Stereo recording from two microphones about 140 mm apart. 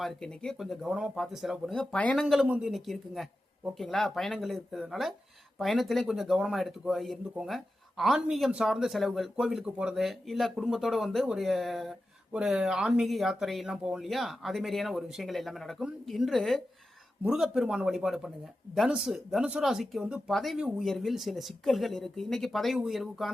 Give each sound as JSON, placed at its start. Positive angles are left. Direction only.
{"t": 0.0, "sound": "speech", "side_deg": 5}
{"t": 2.2, "sound": "speech", "side_deg": -5}